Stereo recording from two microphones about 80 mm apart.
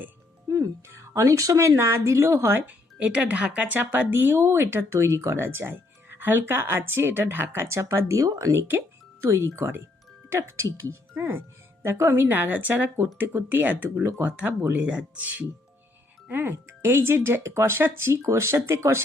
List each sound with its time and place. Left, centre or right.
0.9 s speech: right
2.6 s speech: centre; by 8.5 s right
8.5 s speech: right